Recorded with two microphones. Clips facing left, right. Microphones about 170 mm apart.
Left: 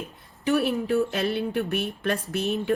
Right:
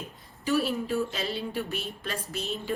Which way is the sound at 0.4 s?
60° left (ahead or behind).